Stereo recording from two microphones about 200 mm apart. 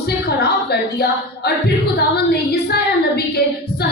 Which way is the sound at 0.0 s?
55° left (ahead or behind).